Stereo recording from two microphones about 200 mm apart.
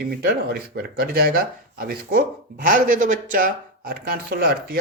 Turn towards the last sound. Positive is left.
turn(degrees=-50)  # may be behind; listen again after turning